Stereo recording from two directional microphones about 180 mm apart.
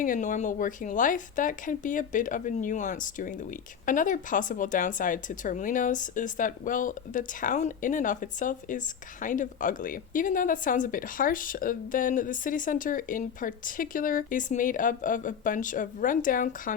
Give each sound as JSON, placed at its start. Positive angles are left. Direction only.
{"t": 0.0, "sound": "speech", "side_deg": 45}